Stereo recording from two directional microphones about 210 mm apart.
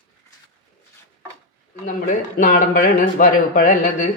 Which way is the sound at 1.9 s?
40° left (ahead or behind).